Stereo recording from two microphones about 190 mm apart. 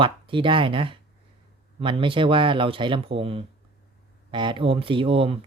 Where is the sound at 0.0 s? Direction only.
25° right (ahead or behind).